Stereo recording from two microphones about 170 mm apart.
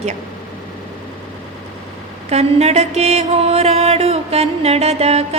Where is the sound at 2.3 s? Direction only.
40° right (ahead or behind).